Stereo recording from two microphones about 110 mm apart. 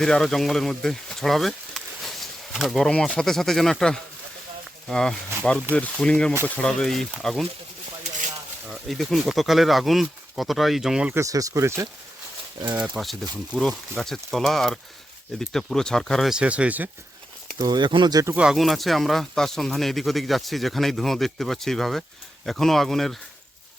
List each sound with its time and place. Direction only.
0.0 s speech: 5° left (ahead or behind)
8.6 s speech: centre (ahead or behind)
11.1 s speech: 30° right (ahead or behind)
12.7 s speech: 15° right (ahead or behind)
13.6 s speech: 5° left (ahead or behind)
16.3 s speech: 10° right (ahead or behind)
17.6 s speech: 40° right (ahead or behind)
18.3 s speech: 5° right (ahead or behind)